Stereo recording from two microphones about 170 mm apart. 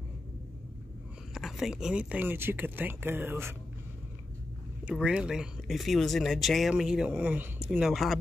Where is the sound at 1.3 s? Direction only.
Centre (ahead or behind).